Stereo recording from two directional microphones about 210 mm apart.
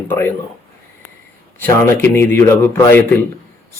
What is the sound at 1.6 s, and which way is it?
Speech, 10° left (ahead or behind).